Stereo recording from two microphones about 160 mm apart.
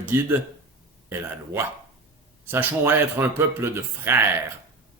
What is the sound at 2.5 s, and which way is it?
Speech, 15° right (ahead or behind).